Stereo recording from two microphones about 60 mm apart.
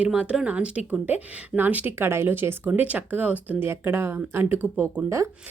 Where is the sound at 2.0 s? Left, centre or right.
Right.